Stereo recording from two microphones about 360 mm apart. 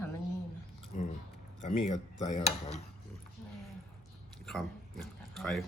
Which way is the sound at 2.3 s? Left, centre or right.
Centre.